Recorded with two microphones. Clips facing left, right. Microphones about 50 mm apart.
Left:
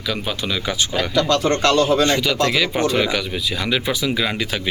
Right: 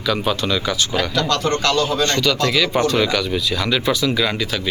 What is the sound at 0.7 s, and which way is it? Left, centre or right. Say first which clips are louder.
Speech: right 1 dB; left.